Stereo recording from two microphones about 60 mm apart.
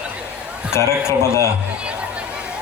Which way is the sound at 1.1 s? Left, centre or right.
Left.